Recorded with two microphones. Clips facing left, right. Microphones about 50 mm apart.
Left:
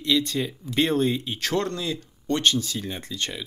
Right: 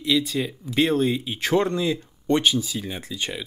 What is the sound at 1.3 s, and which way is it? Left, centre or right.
Speech, centre.